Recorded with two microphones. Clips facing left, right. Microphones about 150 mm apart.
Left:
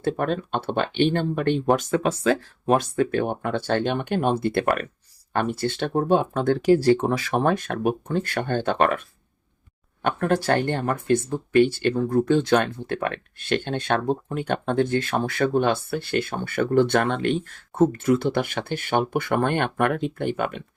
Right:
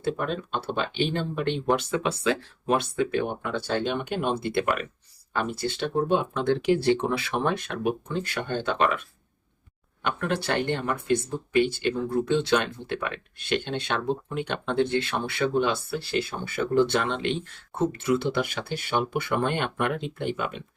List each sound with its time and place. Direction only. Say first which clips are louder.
0.0 s speech: left 4 dB; 50° left (ahead or behind)
10.0 s speech: left 5 dB; 45° left (ahead or behind)